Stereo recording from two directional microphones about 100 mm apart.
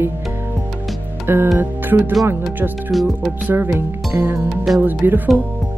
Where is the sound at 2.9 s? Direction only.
Centre (ahead or behind).